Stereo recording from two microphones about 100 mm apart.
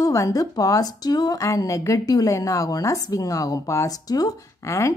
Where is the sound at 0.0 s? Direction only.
35° left (ahead or behind).